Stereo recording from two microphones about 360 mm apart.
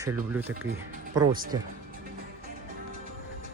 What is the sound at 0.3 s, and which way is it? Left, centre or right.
Speech, centre.